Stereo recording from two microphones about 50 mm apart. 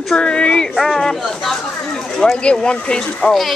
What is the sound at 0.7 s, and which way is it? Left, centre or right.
Speech, centre.